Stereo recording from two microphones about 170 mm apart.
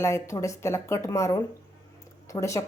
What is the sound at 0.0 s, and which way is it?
A woman's voice, 15° left (ahead or behind).